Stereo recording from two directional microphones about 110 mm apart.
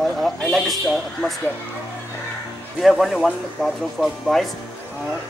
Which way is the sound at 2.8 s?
Centre (ahead or behind).